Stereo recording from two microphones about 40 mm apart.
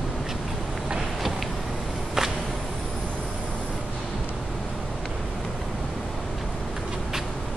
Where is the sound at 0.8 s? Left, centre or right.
Centre.